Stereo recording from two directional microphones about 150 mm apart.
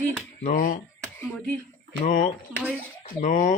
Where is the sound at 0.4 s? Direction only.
55° left (ahead or behind).